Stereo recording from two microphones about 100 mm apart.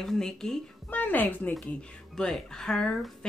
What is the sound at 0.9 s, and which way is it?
Speech, 15° left (ahead or behind).